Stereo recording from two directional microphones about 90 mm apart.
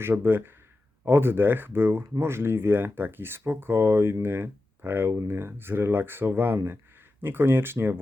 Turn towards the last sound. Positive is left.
turn(degrees=-25)  # may be behind; listen again after turning